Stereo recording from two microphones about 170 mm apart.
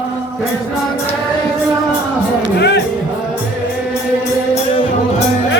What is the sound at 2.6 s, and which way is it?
Music, 80° left.